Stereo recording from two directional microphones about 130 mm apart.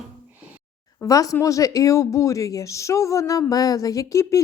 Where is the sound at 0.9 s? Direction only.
25° left (ahead or behind).